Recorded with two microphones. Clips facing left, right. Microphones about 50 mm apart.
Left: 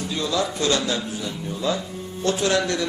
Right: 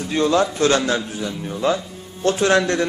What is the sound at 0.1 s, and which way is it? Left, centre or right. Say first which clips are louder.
A man's voice: right 8 dB; right.